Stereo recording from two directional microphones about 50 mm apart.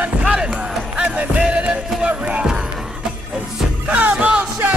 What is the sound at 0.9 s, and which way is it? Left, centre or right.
Music, right.